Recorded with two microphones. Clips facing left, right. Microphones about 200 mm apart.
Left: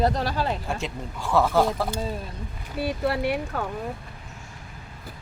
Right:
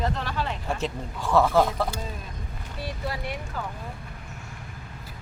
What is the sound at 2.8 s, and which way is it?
Speech, 65° left (ahead or behind).